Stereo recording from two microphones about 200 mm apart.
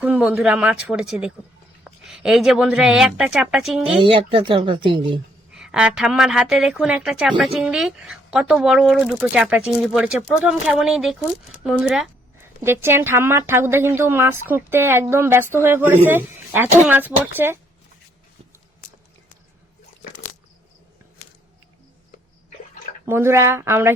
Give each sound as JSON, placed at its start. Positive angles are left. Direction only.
{"t": 0.0, "sound": "a woman's voice", "side_deg": -5}
{"t": 4.0, "sound": "speech", "side_deg": -25}
{"t": 5.5, "sound": "a woman's voice", "side_deg": -5}
{"t": 23.0, "sound": "speech", "side_deg": -10}